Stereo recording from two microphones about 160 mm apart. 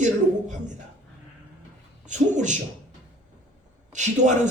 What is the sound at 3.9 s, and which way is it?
Speech, 50° right (ahead or behind).